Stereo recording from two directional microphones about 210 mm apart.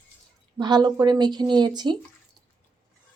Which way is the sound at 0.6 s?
20° right (ahead or behind).